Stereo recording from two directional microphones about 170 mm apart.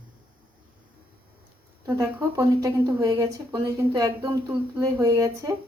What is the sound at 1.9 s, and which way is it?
Speech, 20° right (ahead or behind).